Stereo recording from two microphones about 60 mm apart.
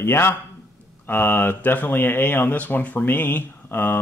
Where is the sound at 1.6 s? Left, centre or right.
Left.